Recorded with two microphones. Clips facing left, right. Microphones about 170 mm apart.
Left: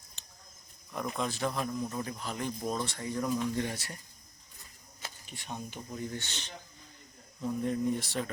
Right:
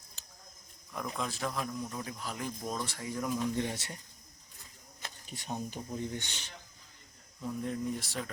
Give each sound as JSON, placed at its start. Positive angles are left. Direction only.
{"t": 0.2, "sound": "a sound", "side_deg": -5}
{"t": 0.9, "sound": "speech", "side_deg": 0}
{"t": 3.5, "sound": "speech", "side_deg": -20}
{"t": 5.3, "sound": "speech", "side_deg": -40}
{"t": 5.9, "sound": "speech", "side_deg": -20}
{"t": 7.6, "sound": "speech", "side_deg": 0}